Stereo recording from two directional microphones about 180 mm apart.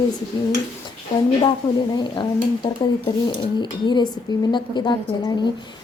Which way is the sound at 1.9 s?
25° left (ahead or behind).